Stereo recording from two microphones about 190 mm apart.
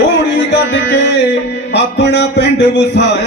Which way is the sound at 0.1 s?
65° left (ahead or behind).